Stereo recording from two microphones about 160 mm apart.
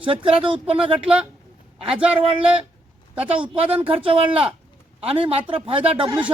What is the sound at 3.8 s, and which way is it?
Speech, 35° right (ahead or behind).